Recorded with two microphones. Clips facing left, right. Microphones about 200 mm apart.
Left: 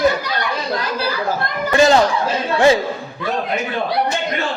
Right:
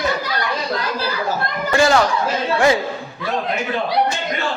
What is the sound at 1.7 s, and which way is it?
Speech, 20° left (ahead or behind).